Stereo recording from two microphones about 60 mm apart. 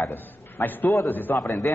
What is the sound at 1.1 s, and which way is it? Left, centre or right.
Speech, left.